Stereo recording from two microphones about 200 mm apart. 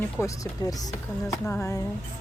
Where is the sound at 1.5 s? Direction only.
10° left (ahead or behind).